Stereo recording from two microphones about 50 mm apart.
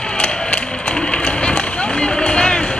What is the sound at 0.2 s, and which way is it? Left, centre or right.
Run, centre.